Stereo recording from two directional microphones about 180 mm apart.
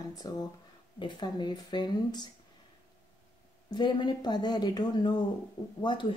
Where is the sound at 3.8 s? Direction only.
25° left (ahead or behind).